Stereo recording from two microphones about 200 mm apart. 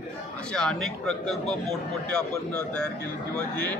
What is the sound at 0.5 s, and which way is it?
A man's voice, 5° left (ahead or behind).